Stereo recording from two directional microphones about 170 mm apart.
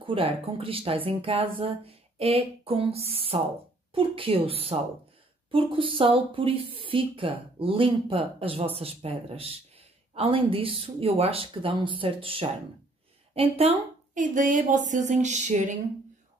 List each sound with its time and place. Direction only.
0.0 s speech: 30° right (ahead or behind)